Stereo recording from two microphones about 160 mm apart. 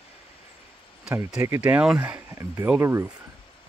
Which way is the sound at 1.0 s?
5° right (ahead or behind).